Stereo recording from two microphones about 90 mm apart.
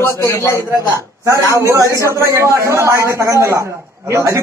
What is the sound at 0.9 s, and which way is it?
A man's voice, 35° right (ahead or behind).